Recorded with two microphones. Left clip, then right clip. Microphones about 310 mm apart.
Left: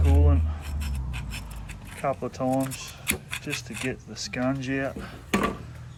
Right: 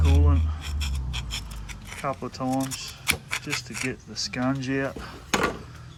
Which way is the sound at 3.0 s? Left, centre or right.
Right.